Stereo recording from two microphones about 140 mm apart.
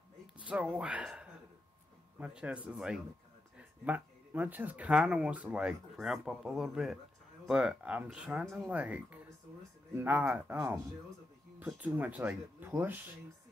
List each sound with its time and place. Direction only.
0.4 s speech: 10° right (ahead or behind)